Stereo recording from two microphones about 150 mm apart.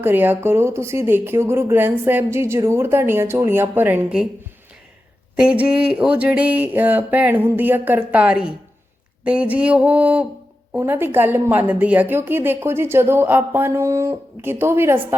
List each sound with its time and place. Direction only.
0.0 s a woman's voice: 15° right (ahead or behind)
5.4 s a woman's voice: 5° right (ahead or behind)